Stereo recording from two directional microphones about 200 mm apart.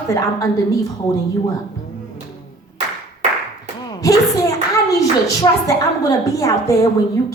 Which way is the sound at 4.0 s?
15° left (ahead or behind).